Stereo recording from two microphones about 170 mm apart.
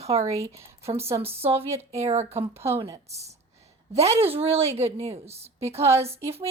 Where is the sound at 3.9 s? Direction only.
40° right (ahead or behind).